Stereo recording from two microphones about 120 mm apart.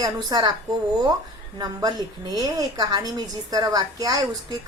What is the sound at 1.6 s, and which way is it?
A woman's voice, 30° right (ahead or behind).